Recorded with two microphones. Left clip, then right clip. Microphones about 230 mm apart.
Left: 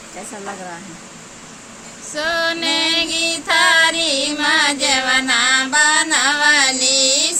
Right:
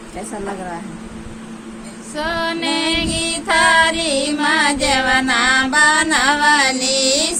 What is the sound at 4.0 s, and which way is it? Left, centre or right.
Music, centre.